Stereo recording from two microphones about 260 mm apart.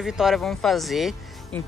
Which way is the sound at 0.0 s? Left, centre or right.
Centre.